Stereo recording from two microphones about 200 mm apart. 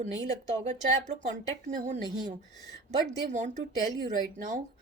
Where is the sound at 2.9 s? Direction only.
35° right (ahead or behind).